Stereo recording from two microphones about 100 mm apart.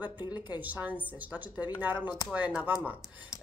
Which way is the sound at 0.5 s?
15° right (ahead or behind).